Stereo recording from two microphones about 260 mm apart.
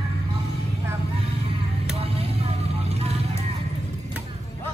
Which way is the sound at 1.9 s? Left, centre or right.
Right.